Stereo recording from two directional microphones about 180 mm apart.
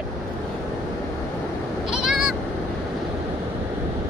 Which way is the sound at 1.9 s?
5° right (ahead or behind).